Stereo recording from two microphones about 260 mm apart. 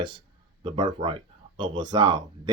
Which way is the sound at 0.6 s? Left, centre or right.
Centre.